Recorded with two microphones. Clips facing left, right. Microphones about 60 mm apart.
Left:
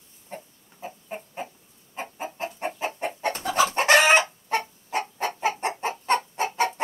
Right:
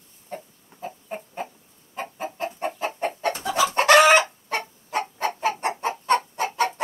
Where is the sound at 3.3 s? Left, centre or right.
Left.